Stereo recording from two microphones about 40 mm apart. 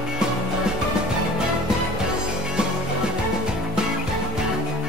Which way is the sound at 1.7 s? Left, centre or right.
Centre.